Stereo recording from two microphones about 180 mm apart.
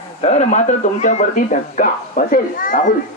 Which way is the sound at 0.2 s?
35° left (ahead or behind).